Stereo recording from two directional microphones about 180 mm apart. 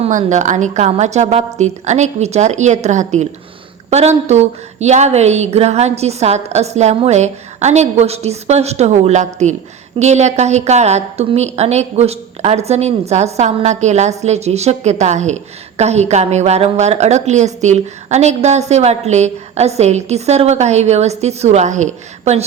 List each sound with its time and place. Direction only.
0.0 s a woman's voice: 40° right (ahead or behind)